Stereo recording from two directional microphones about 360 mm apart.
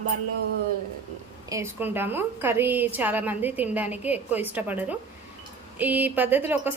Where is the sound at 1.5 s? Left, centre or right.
Centre.